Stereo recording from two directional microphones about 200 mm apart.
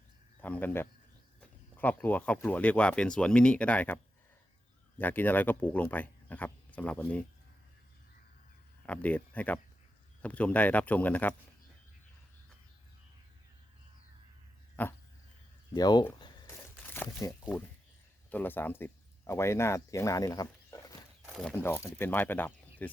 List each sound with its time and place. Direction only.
0.4 s speech: 10° left (ahead or behind)
8.9 s speech: 10° left (ahead or behind)
14.8 s speech: 10° left (ahead or behind)
15.7 s speech: 20° left (ahead or behind)
21.2 s a sound: centre (ahead or behind)
21.5 s speech: 10° left (ahead or behind)